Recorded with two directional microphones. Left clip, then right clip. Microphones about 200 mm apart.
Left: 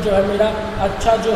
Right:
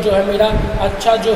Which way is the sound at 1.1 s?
15° right (ahead or behind).